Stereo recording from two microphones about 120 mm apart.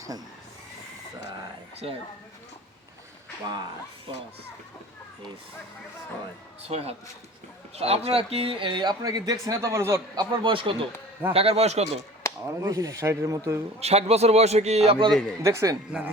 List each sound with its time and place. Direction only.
1.8 s a man's voice: 55° right (ahead or behind)
6.6 s a man's voice: 60° right (ahead or behind); by 10.2 s 25° right (ahead or behind)
10.4 s a man's voice: 45° right (ahead or behind); by 11.9 s 60° right (ahead or behind)
12.5 s speech: 25° right (ahead or behind)
13.7 s a man's voice: 60° right (ahead or behind)
15.1 s speech: 5° left (ahead or behind)
15.4 s speech: 25° right (ahead or behind)